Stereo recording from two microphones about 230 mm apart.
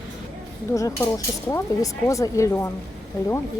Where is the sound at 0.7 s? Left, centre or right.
Centre.